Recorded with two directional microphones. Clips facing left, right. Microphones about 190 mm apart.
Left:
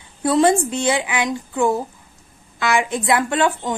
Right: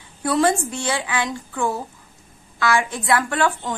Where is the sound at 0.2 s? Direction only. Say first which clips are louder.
Left 4 dB; 20° left (ahead or behind).